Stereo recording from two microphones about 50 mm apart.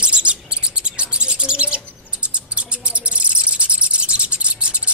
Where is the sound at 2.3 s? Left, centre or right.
Right.